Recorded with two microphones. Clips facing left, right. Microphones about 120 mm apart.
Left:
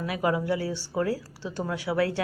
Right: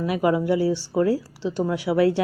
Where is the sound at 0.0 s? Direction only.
20° right (ahead or behind).